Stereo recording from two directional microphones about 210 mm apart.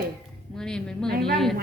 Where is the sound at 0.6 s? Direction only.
5° left (ahead or behind).